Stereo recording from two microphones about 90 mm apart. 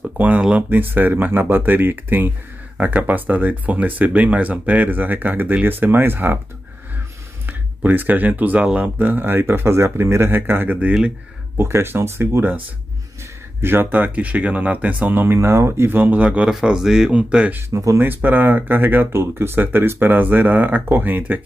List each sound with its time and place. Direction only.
0.2 s speech: 15° right (ahead or behind)
7.4 s speech: 20° right (ahead or behind)
16.3 s speech: 10° right (ahead or behind)
17.6 s speech: 30° right (ahead or behind)
18.0 s speech: 20° right (ahead or behind)